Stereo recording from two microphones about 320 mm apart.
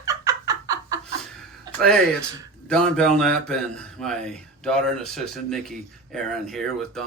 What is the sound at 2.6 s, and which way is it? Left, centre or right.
A man's voice, centre.